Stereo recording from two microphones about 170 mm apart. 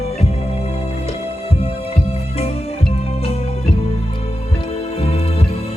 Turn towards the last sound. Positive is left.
turn(degrees=35)  # may be behind; listen again after turning